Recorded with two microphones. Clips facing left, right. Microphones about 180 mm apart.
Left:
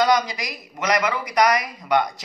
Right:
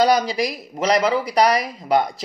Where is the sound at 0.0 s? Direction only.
30° right (ahead or behind).